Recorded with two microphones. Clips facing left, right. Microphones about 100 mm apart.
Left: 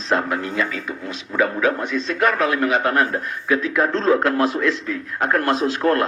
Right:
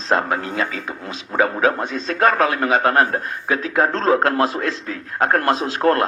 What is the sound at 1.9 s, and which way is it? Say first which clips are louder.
Speech: left 3 dB; 50° right (ahead or behind).